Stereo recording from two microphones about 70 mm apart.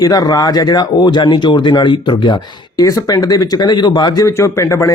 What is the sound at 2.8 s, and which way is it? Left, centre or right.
Speech, left.